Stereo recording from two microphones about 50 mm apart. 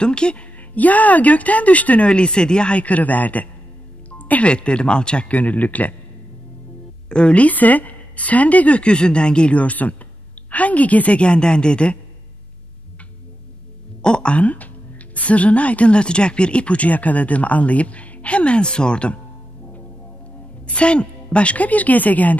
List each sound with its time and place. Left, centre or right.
0.0 s speech: centre
0.6 s speech: left
7.1 s speech: left
14.0 s speech: centre
20.6 s speech: left